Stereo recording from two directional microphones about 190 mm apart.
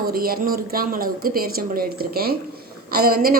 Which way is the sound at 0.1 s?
50° right (ahead or behind).